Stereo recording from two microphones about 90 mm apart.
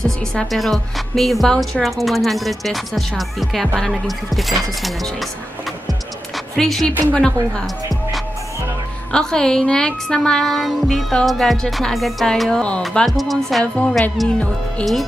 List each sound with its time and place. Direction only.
0.0 s a woman's voice: 5° left (ahead or behind)
5.9 s music: centre (ahead or behind)
7.2 s a woman's voice: 10° left (ahead or behind)
7.6 s music: centre (ahead or behind)
9.1 s a woman's voice: 5° left (ahead or behind)
13.7 s a woman's voice: 10° left (ahead or behind)